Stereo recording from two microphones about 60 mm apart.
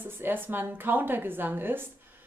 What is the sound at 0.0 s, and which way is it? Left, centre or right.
A woman's voice, right.